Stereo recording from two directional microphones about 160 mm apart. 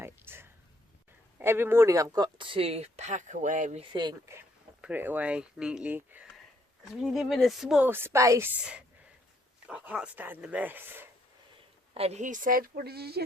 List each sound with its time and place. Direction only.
0.0 s a sound: 15° right (ahead or behind)
1.4 s speech: 15° right (ahead or behind); by 3.8 s 50° right (ahead or behind)
4.3 s speech: 10° right (ahead or behind)
7.9 s speech: 15° right (ahead or behind)
8.5 s speech: 5° right (ahead or behind)
11.9 s a woman's voice: 45° right (ahead or behind); by 13.2 s 80° right